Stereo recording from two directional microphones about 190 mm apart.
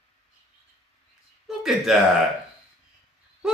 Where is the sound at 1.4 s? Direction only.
Centre (ahead or behind).